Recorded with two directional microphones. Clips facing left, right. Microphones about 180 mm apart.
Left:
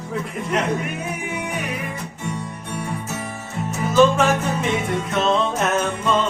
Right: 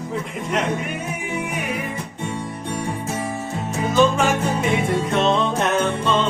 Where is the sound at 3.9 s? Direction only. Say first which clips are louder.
Left 2 dB; centre (ahead or behind).